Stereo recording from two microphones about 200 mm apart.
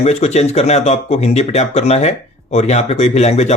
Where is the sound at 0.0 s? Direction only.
30° left (ahead or behind).